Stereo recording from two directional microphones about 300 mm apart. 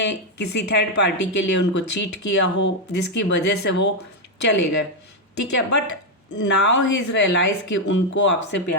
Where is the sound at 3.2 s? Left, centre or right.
Left.